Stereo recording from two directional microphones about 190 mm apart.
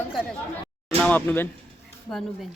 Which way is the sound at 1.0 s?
10° left (ahead or behind).